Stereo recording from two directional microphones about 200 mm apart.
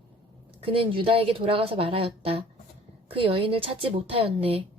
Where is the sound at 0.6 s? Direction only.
25° right (ahead or behind).